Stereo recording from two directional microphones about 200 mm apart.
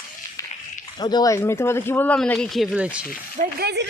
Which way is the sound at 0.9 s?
20° left (ahead or behind).